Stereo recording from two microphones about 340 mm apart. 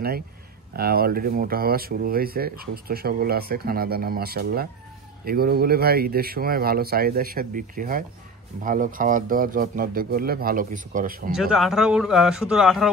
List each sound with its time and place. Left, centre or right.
0.7 s speech: right
11.3 s speech: centre